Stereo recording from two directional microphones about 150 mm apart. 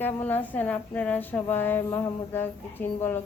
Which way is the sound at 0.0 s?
15° left (ahead or behind).